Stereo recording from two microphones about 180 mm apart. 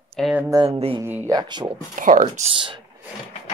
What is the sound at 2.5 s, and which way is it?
Speech, 30° right (ahead or behind).